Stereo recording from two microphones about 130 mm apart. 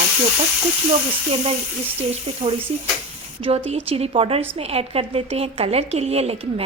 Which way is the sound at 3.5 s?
50° right (ahead or behind).